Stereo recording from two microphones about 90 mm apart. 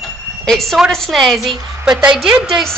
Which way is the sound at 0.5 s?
5° left (ahead or behind).